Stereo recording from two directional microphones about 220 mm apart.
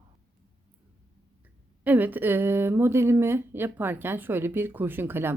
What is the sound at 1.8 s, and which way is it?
A woman's voice, 5° right (ahead or behind).